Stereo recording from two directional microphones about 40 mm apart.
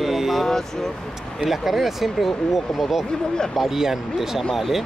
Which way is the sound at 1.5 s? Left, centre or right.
Centre.